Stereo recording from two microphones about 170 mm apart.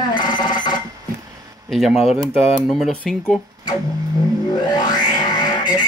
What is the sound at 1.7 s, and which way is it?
Speech, centre (ahead or behind).